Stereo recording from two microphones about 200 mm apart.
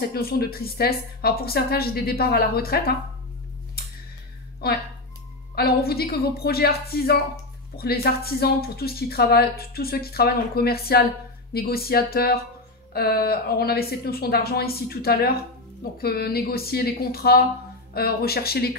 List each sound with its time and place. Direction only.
0.0 s speech: 50° left (ahead or behind)
5.6 s speech: 50° left (ahead or behind)